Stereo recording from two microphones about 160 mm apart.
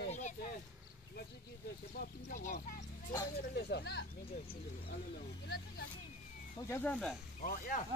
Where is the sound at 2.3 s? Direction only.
50° left (ahead or behind).